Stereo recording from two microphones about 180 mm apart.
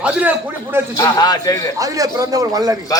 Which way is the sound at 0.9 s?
20° left (ahead or behind).